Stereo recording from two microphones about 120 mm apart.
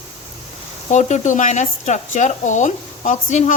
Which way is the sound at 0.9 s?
85° left.